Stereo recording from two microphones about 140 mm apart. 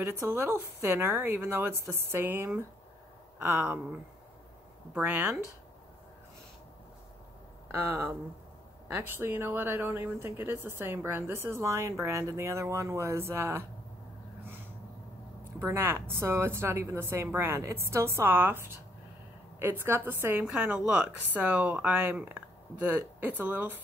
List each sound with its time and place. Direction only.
0.0 s a woman's voice: 15° right (ahead or behind)
4.9 s a woman's voice: 15° right (ahead or behind)
7.7 s a woman's voice: 15° right (ahead or behind)
15.6 s a woman's voice: 15° right (ahead or behind)
23.4 s a woman's voice: 15° right (ahead or behind)